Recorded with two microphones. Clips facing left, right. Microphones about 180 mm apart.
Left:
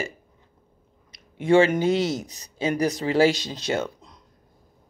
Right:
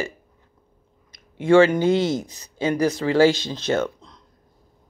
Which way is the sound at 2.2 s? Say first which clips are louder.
Right 2 dB; 35° left (ahead or behind).